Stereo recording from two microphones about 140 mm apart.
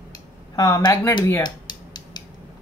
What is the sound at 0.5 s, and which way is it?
Speech, 25° left (ahead or behind).